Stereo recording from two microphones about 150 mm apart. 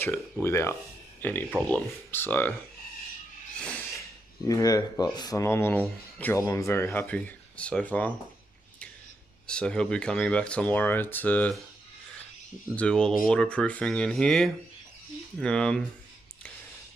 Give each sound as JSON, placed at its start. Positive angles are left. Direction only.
{"t": 0.0, "sound": "speech", "side_deg": 15}
{"t": 4.5, "sound": "speech", "side_deg": 25}
{"t": 9.5, "sound": "speech", "side_deg": 5}
{"t": 12.7, "sound": "speech", "side_deg": 5}